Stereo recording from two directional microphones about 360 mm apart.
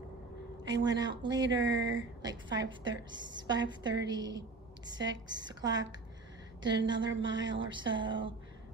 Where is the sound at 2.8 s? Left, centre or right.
Centre.